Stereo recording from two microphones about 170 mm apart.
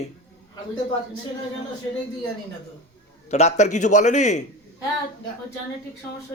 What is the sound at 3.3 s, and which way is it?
A man's voice, 40° left (ahead or behind).